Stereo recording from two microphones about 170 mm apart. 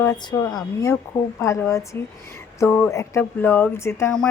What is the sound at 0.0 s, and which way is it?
A woman's voice, 20° left (ahead or behind).